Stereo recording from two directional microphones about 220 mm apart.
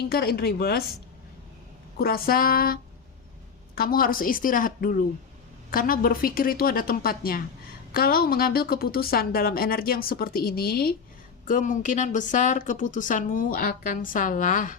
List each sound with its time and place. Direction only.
0.0 s a woman's voice: 45° left (ahead or behind)
2.0 s a woman's voice: 45° left (ahead or behind)
3.8 s a woman's voice: 40° left (ahead or behind)